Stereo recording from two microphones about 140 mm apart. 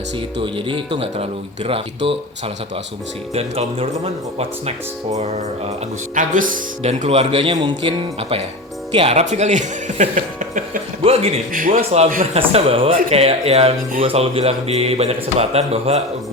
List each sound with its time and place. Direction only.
0.4 s speech: 40° right (ahead or behind)
3.3 s speech: 45° right (ahead or behind)
6.1 s speech: 70° right (ahead or behind)
6.8 s speech: 50° right (ahead or behind); by 10.6 s 65° right (ahead or behind)
11.0 s speech: 45° right (ahead or behind)
11.5 s a man's voice: 80° right
12.3 s speech: 45° right (ahead or behind)